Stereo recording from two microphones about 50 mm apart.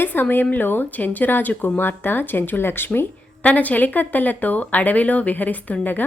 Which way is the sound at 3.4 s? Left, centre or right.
Left.